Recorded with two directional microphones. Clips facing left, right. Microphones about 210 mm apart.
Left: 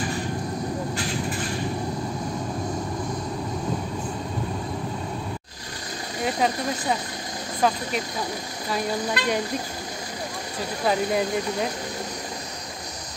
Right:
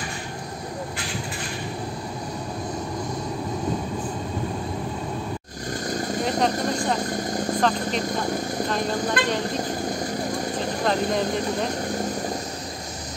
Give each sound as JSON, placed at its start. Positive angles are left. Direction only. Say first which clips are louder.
{"t": 6.2, "sound": "a sound", "louder": "even", "side_deg": 5}
{"t": 9.2, "sound": "speech", "louder": "right 2 dB", "side_deg": -50}
{"t": 10.9, "sound": "speech", "louder": "left 1 dB", "side_deg": 5}